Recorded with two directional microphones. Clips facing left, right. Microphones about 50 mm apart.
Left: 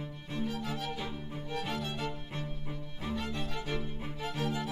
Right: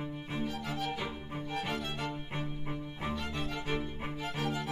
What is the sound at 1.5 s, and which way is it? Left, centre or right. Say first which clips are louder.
Music: even; right.